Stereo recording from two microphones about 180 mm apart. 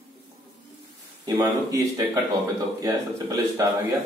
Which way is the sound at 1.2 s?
20° right (ahead or behind).